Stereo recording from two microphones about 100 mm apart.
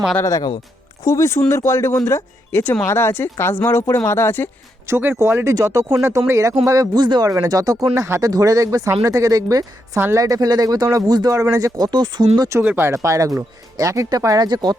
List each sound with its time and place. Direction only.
0.2 s speech: 35° left (ahead or behind)
1.0 s speech: 30° left (ahead or behind)
4.9 s speech: 25° right (ahead or behind)
11.9 s speech: 45° right (ahead or behind)
12.6 s speech: 25° right (ahead or behind); by 14.8 s 45° right (ahead or behind)